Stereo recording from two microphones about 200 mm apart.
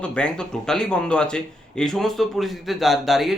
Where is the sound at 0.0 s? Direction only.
5° left (ahead or behind).